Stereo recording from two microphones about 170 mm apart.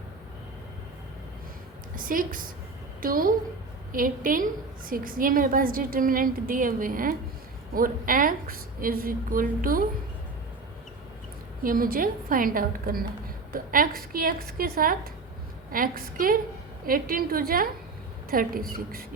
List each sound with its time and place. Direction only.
2.0 s a woman's voice: 55° right (ahead or behind)
11.6 s a woman's voice: 55° right (ahead or behind)